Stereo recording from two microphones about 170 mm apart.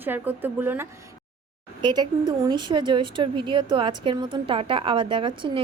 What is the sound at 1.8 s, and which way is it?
A woman's voice, 25° right (ahead or behind).